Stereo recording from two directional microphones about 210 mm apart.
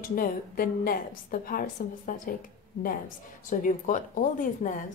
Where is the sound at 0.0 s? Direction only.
45° left (ahead or behind).